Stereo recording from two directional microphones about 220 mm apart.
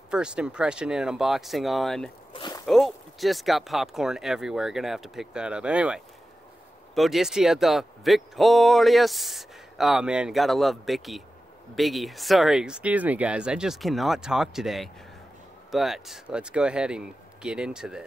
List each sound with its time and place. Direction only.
0.1 s speech: 5° right (ahead or behind)
2.3 s a sound: 20° left (ahead or behind)
2.6 s speech: centre (ahead or behind)